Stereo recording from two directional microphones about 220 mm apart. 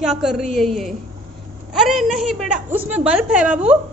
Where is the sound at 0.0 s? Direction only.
Centre (ahead or behind).